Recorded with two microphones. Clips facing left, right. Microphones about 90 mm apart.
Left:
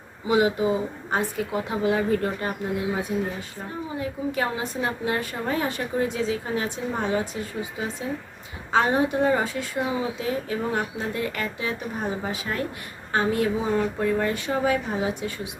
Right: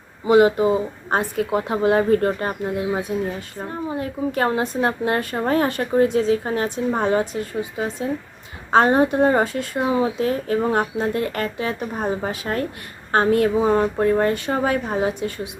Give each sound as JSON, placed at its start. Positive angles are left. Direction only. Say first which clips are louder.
{"t": 0.3, "sound": "speech", "louder": "right 6 dB", "side_deg": -50}
{"t": 3.9, "sound": "speech", "louder": "right 3 dB", "side_deg": -50}